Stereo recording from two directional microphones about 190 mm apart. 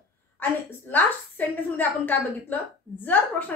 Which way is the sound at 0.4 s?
10° left (ahead or behind).